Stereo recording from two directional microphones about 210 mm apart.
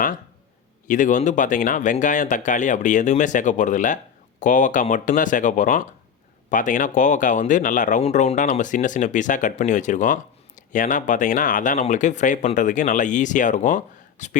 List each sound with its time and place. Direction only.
0.9 s speech: 35° left (ahead or behind)